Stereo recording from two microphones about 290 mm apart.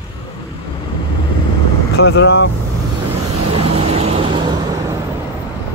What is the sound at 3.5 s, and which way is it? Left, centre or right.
Vehicle, centre.